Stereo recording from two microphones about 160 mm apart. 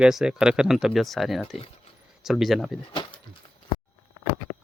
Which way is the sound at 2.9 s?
30° left (ahead or behind).